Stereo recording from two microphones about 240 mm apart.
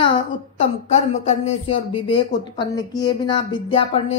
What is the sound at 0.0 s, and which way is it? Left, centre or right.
Speech, left.